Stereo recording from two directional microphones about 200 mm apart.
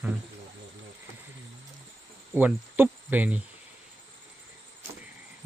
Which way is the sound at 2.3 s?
10° right (ahead or behind).